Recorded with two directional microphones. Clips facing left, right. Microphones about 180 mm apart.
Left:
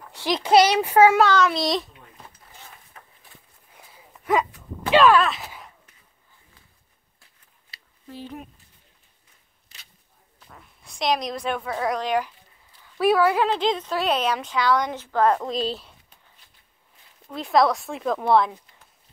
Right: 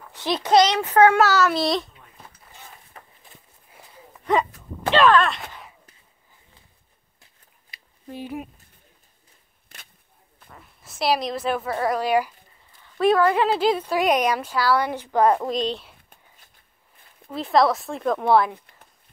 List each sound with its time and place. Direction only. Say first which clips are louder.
0.1 s a child's voice: left 1 dB; 15° left (ahead or behind)
1.2 s speech: even; 5° right (ahead or behind)
3.7 s a sound: right 3 dB; centre (ahead or behind)
4.9 s speech: left 1 dB; 5° left (ahead or behind)
7.7 s a sound: right 3 dB; 15° right (ahead or behind)
9.7 s a sound: right 6 dB; 55° right (ahead or behind)
10.5 s a woman's voice: right 1 dB; centre (ahead or behind)
12.8 s speech: right 1 dB; 5° left (ahead or behind); by 15.5 s 10° right (ahead or behind)
15.5 s speech: right 1 dB; centre (ahead or behind)
17.3 s speech: right 1 dB; centre (ahead or behind)